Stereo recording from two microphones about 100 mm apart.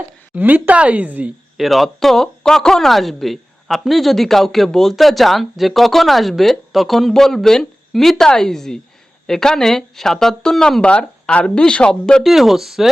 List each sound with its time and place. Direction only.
0.3 s speech: 15° right (ahead or behind)
1.5 s speech: centre (ahead or behind)